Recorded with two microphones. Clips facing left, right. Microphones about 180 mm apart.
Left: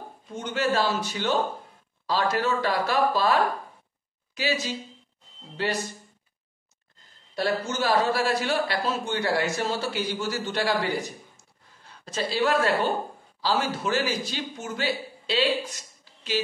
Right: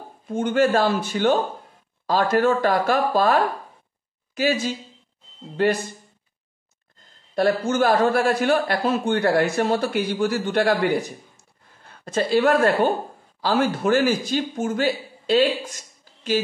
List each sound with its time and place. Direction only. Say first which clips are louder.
0.3 s speech: right 8 dB; 50° right (ahead or behind)
4.4 s speech: right 6 dB; 50° right (ahead or behind)
7.3 s a man's voice: right 7 dB; 55° right (ahead or behind)
16.1 s a sound: right 2 dB; 45° right (ahead or behind)